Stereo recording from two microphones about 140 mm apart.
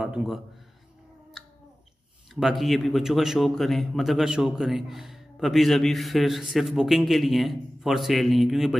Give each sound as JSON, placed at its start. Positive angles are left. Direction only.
{"t": 0.0, "sound": "speech", "side_deg": -5}
{"t": 2.3, "sound": "speech", "side_deg": 0}